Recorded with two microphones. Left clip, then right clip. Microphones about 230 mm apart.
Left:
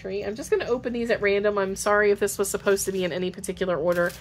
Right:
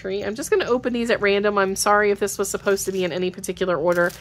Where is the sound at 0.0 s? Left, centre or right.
Right.